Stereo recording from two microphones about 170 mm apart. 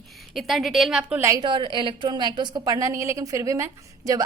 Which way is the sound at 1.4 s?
30° right (ahead or behind).